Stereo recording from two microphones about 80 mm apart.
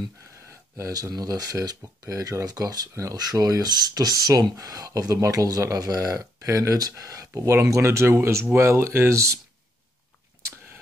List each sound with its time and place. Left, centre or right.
0.5 s speech: right
3.2 s speech: right
10.4 s a sound: right